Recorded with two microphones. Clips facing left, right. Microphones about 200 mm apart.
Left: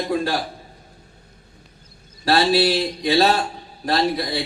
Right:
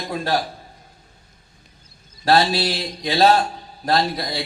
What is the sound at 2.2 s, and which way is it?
Speech, 45° right (ahead or behind).